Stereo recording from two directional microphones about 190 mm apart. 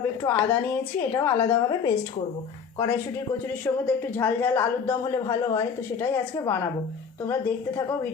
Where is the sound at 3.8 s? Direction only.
10° left (ahead or behind).